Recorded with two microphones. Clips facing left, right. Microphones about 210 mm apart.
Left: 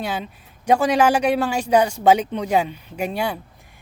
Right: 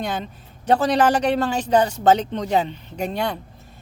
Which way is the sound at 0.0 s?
10° left (ahead or behind).